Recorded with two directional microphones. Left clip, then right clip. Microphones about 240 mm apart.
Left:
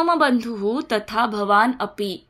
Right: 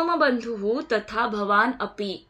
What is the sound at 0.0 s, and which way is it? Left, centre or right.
A woman's voice, left.